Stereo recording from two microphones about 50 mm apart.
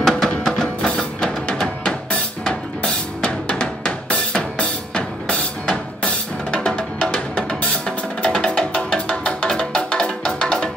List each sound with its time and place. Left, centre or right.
0.0 s music: centre
2.4 s drum kit: centre
6.6 s music: centre